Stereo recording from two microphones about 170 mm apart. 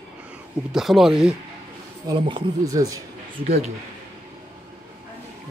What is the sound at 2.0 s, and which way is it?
Speech, 30° right (ahead or behind).